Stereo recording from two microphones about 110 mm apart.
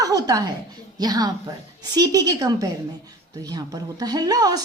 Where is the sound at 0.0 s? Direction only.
35° right (ahead or behind).